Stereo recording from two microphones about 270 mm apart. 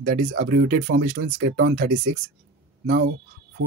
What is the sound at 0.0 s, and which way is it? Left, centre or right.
Speech, right.